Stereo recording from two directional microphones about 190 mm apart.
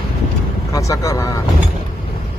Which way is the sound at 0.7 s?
15° left (ahead or behind).